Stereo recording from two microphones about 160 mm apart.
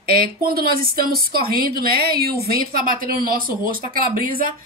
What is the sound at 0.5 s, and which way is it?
A woman's voice, 70° right (ahead or behind).